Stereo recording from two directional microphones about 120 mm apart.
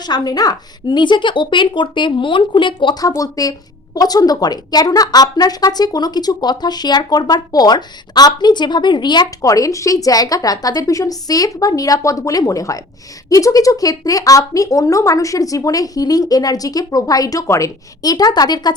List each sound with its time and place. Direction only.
0.1 s a woman's voice: 35° left (ahead or behind)